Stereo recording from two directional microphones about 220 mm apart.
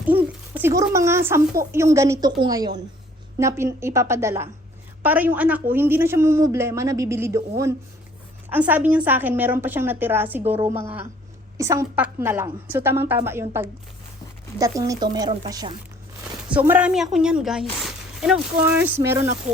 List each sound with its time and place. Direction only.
0.0 s a sound: 10° right (ahead or behind)
0.8 s speech: 15° right (ahead or behind)
8.5 s speech: 5° right (ahead or behind)
16.5 s a woman's voice: 5° right (ahead or behind)